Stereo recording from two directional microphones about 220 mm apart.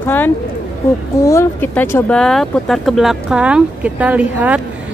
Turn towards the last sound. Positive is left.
turn(degrees=-5)  # may be behind; listen again after turning